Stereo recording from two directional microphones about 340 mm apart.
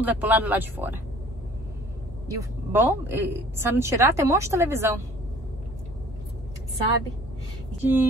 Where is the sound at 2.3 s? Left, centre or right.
Centre.